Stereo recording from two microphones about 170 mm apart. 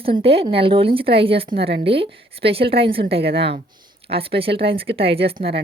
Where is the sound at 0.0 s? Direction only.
35° right (ahead or behind).